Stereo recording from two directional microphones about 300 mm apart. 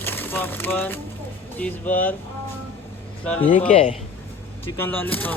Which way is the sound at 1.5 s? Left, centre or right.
Centre.